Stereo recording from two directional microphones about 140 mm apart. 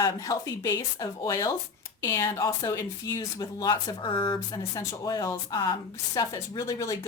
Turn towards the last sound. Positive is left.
turn(degrees=20)  # may be behind; listen again after turning